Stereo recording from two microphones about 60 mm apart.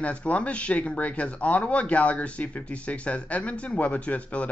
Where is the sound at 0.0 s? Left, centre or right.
Left.